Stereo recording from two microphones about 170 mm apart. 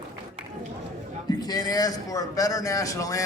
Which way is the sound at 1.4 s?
25° left (ahead or behind).